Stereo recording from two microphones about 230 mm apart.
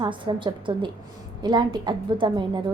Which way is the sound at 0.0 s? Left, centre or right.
Right.